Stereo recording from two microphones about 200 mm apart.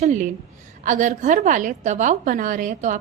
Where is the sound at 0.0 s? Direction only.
40° right (ahead or behind).